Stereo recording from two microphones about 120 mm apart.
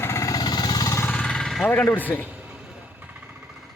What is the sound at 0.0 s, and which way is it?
Jackhammer, 25° left (ahead or behind).